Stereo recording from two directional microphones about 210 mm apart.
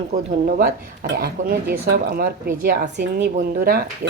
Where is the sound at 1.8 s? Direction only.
45° right (ahead or behind).